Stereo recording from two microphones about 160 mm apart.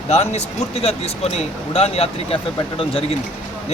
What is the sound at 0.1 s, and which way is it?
Speech, 40° left (ahead or behind).